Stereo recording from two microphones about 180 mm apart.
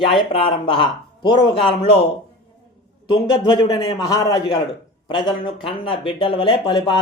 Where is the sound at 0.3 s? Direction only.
30° left (ahead or behind).